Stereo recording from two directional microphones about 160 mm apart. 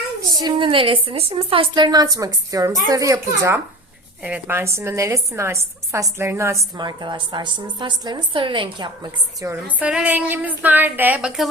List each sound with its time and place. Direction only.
0.3 s a woman's voice: 30° right (ahead or behind)
9.4 s speech: 15° right (ahead or behind)